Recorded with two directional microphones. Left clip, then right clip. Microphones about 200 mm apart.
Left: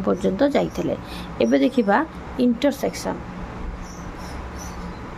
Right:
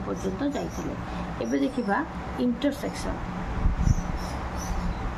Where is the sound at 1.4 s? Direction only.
55° left (ahead or behind).